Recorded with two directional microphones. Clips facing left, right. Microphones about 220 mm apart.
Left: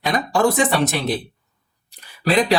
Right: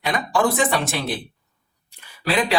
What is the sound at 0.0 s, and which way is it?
Speech, 40° left (ahead or behind).